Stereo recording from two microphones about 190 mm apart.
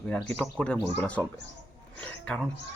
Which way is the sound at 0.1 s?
10° left (ahead or behind).